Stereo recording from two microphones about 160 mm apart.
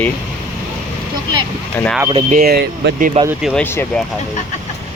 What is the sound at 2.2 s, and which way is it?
Speech, 65° right (ahead or behind).